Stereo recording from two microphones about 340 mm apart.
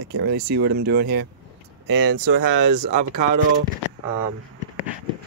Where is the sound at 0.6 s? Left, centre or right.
Right.